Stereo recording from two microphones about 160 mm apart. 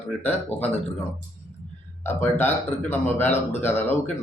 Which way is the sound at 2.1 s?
15° left (ahead or behind).